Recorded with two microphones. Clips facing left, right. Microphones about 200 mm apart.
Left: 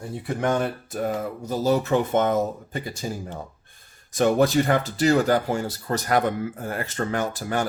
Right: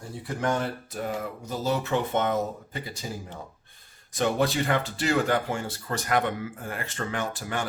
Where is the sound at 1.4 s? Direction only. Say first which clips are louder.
Left 6 dB; 40° left (ahead or behind).